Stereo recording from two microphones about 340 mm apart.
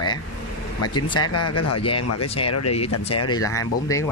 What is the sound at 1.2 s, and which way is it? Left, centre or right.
Speech, left.